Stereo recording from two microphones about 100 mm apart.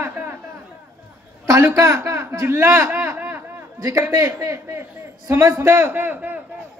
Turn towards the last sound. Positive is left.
turn(degrees=-20)  # may be behind; listen again after turning